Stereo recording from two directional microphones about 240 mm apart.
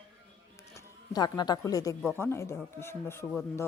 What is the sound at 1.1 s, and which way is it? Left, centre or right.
Speech, centre.